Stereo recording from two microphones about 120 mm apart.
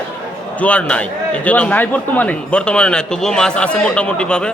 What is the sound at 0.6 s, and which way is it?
A man's voice, 10° left (ahead or behind).